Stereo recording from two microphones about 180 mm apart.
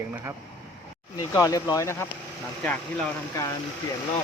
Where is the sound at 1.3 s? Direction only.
15° left (ahead or behind).